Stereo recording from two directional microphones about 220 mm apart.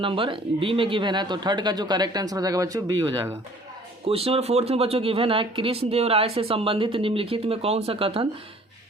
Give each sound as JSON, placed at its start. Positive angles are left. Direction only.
{"t": 0.0, "sound": "speech", "side_deg": -25}
{"t": 4.0, "sound": "speech", "side_deg": -25}